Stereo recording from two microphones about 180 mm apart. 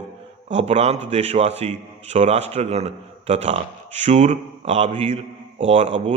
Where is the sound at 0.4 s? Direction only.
35° right (ahead or behind).